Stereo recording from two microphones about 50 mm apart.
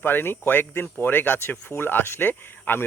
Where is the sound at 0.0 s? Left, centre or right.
Left.